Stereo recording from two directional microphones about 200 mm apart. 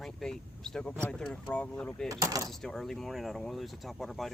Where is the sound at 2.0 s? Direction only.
15° right (ahead or behind).